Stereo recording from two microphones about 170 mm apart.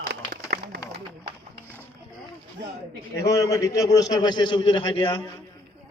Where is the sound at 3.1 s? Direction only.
20° left (ahead or behind).